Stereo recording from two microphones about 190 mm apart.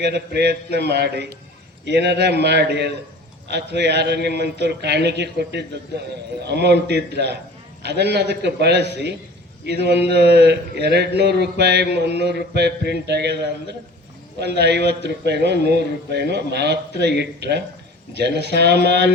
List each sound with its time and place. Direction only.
0.0 s a man's voice: 60° right (ahead or behind)